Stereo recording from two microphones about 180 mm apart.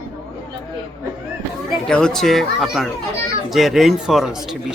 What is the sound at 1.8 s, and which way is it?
Speech, 5° left (ahead or behind).